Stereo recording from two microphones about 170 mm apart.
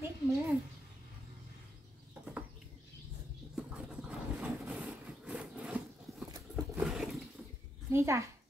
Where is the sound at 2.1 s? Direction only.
10° right (ahead or behind).